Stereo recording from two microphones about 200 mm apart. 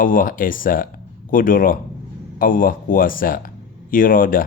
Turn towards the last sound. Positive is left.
turn(degrees=45)  # may be behind; listen again after turning